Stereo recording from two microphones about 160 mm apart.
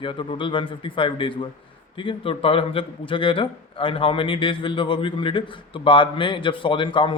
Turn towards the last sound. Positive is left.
turn(degrees=30)  # may be behind; listen again after turning